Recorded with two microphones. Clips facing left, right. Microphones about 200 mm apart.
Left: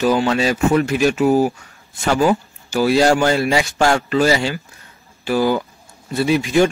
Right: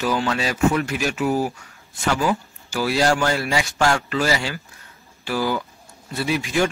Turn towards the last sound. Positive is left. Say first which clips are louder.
# left 6 dB
turn(degrees=25)  # may be behind; listen again after turning